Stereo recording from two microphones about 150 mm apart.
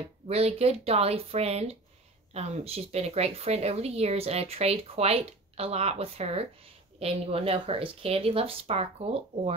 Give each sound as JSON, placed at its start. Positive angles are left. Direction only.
{"t": 0.3, "sound": "speech", "side_deg": -45}